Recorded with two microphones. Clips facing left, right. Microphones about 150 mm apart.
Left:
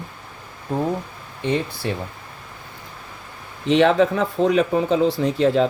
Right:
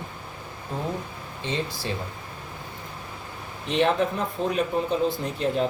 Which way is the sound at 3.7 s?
90° left.